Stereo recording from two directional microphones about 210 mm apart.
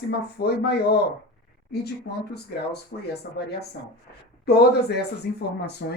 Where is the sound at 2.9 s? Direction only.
40° left (ahead or behind).